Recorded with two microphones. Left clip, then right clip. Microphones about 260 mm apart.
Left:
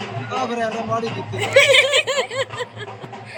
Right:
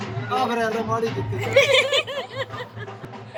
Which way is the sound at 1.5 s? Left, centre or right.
Centre.